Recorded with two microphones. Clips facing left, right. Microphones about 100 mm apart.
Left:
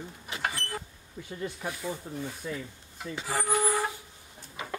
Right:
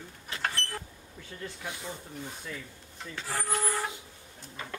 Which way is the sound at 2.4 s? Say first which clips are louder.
Left 6 dB; 15° left (ahead or behind).